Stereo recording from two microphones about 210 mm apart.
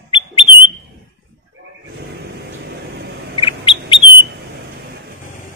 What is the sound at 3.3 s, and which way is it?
Bird, 25° left (ahead or behind).